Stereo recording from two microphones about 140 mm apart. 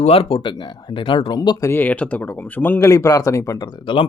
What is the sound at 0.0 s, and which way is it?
Speech, 45° left (ahead or behind).